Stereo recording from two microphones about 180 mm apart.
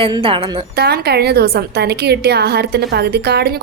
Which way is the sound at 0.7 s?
65° right (ahead or behind).